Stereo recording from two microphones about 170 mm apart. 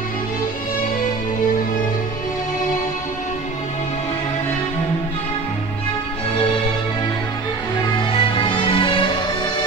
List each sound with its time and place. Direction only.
7.8 s music: 30° left (ahead or behind)